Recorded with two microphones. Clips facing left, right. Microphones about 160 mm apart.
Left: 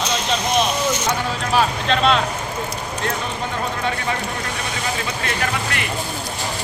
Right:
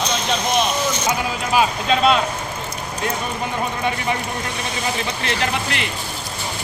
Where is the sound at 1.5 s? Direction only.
5° right (ahead or behind).